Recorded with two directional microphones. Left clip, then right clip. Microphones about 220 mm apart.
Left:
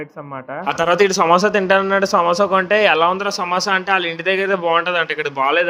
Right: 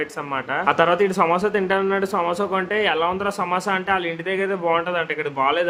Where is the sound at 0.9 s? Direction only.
20° left (ahead or behind).